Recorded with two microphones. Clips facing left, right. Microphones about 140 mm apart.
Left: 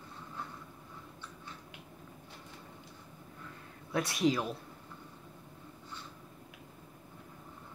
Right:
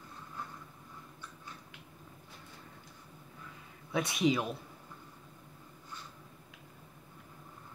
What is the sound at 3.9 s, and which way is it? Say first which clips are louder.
Speech: even; centre (ahead or behind).